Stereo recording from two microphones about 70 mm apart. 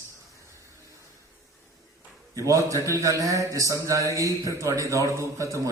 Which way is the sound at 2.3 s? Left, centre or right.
Right.